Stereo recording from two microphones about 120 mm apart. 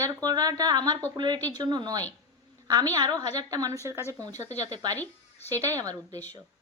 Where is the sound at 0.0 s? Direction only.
30° right (ahead or behind).